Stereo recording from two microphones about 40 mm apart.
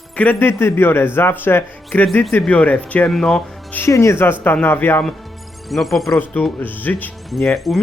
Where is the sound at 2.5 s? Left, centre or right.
Left.